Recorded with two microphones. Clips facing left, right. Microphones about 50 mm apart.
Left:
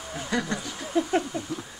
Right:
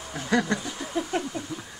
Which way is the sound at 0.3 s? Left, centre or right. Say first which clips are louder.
Right 4 dB; right.